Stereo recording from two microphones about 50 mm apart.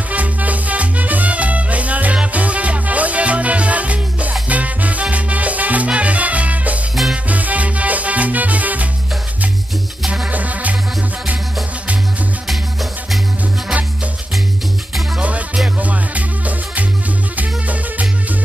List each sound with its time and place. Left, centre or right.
0.1 s music: right
10.2 s music: right
15.1 s music: right